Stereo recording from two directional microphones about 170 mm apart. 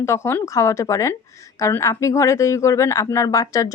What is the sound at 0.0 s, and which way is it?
Speech, 15° left (ahead or behind).